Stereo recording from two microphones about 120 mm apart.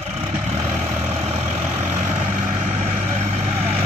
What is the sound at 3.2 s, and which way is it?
Vehicle, 65° right (ahead or behind).